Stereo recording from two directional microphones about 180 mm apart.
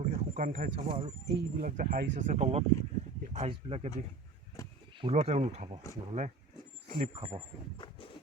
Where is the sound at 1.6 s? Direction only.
50° right (ahead or behind); by 3.9 s 30° right (ahead or behind).